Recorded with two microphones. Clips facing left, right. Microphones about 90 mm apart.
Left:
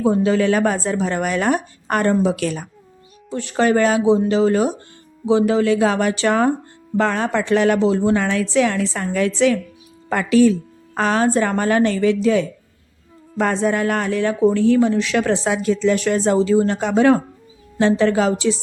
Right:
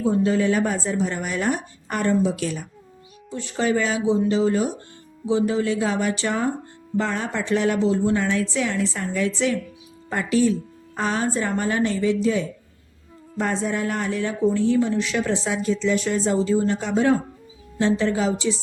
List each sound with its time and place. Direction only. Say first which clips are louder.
0.0 s speech: left 4 dB; 90° left; by 18.5 s 65° left (ahead or behind)